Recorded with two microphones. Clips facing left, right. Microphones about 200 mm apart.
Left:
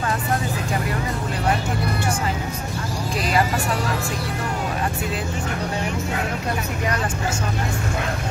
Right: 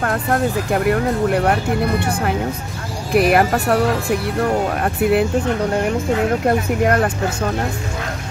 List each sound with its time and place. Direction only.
0.0 s speech: 60° right (ahead or behind)
4.8 s speech: 60° right (ahead or behind)
6.4 s speech: 55° right (ahead or behind)